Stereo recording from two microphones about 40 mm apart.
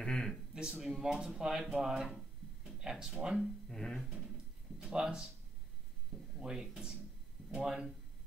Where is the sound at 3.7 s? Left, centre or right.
Centre.